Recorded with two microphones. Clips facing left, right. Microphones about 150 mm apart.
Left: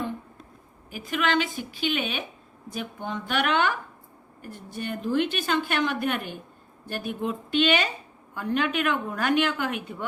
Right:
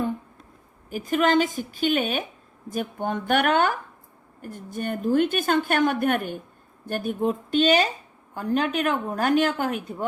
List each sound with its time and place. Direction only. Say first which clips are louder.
0.9 s a woman's voice: right 5 dB; 45° right (ahead or behind)